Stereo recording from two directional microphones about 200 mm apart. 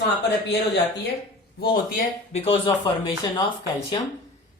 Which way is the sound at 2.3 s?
30° left (ahead or behind).